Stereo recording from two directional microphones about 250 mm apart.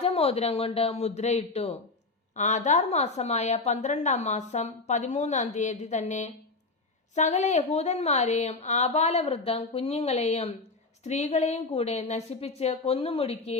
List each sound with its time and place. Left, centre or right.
0.0 s a woman's voice: left